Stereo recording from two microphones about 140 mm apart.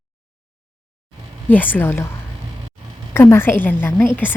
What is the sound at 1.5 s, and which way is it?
Speech, 15° left (ahead or behind).